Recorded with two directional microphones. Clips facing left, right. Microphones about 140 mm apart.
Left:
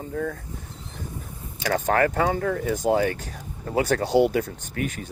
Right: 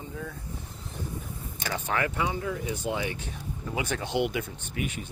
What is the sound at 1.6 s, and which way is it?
Speech, 40° left (ahead or behind).